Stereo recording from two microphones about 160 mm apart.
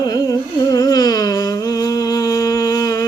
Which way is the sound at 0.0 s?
25° left (ahead or behind).